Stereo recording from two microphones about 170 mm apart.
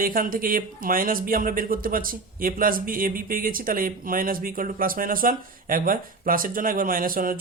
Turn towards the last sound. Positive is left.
turn(degrees=-55)  # may be behind; listen again after turning